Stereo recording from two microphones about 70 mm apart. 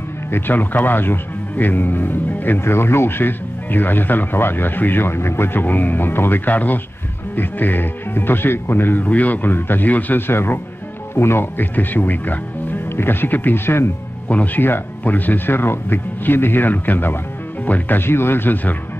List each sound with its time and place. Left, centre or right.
0.3 s speech: left